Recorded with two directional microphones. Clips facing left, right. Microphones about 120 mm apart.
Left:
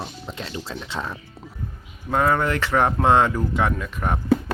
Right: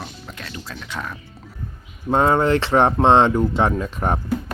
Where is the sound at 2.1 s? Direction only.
30° right (ahead or behind).